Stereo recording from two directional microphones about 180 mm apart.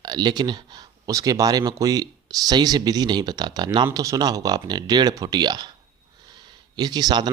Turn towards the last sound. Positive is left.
turn(degrees=-25)  # may be behind; listen again after turning